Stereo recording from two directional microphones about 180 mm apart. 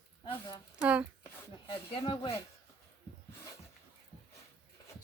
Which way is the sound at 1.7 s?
30° left (ahead or behind).